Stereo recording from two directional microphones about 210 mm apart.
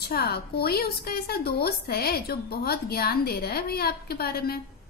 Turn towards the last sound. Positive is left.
turn(degrees=45)  # may be behind; listen again after turning